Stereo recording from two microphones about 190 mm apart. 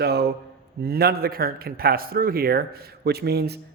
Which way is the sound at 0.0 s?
60° right (ahead or behind).